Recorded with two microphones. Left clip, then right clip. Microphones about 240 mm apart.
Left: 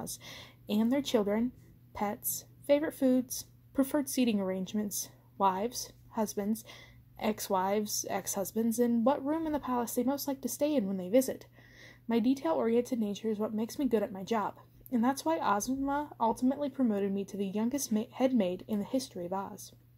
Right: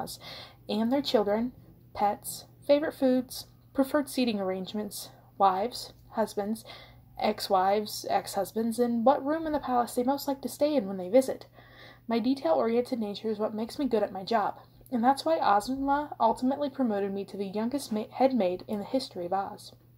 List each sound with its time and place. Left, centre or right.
0.3 s speech: left
2.6 s speech: left
12.1 s speech: left